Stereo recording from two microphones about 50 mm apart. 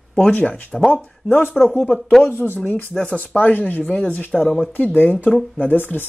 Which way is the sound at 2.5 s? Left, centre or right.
Left.